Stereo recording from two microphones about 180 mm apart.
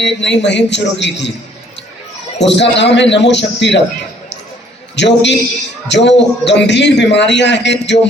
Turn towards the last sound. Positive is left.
turn(degrees=75)  # may be behind; listen again after turning